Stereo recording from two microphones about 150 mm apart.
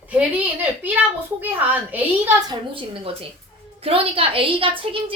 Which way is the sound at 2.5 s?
40° right (ahead or behind).